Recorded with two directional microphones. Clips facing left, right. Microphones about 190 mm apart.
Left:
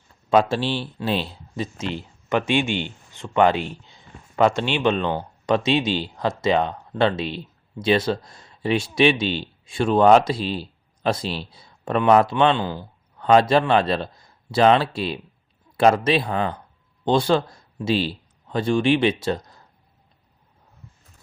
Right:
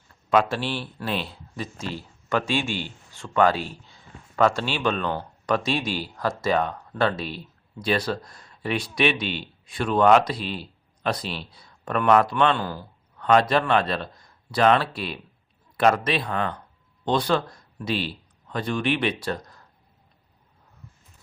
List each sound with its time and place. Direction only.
0.3 s speech: 30° left (ahead or behind)
3.1 s speech: 20° left (ahead or behind)
3.8 s a sound: 20° left (ahead or behind)
4.8 s speech: 25° left (ahead or behind)
13.1 s a man's voice: 30° left (ahead or behind)